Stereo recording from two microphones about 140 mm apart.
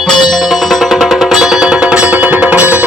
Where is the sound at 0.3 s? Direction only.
Centre (ahead or behind).